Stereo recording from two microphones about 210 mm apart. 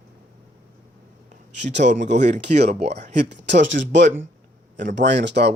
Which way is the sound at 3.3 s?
55° right (ahead or behind).